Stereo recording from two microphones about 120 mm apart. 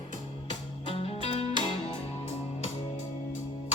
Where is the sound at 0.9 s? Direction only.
55° left (ahead or behind).